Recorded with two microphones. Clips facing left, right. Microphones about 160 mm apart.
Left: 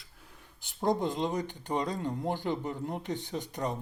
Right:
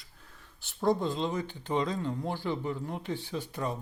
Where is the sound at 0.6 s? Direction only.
15° left (ahead or behind).